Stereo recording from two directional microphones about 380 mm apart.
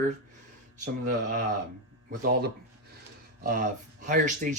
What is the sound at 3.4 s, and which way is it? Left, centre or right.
Speech, right.